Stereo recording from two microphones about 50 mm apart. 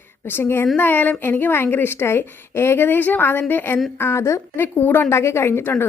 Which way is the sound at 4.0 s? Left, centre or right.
Left.